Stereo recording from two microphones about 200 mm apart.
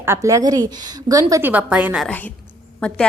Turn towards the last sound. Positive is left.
turn(degrees=5)  # may be behind; listen again after turning